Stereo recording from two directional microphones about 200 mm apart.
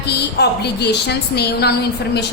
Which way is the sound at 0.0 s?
55° left (ahead or behind).